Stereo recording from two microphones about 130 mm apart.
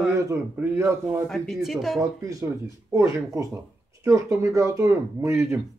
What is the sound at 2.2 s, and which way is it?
Speech, 25° right (ahead or behind).